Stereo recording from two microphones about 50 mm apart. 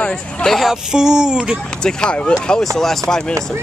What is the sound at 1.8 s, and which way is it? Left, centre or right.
Speech, centre.